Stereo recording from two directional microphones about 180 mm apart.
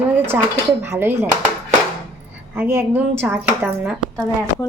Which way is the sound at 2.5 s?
10° right (ahead or behind).